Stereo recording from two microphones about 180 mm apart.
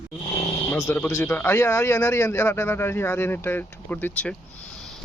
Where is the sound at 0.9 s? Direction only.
15° left (ahead or behind).